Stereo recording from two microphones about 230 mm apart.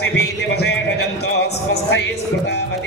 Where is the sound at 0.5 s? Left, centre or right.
Left.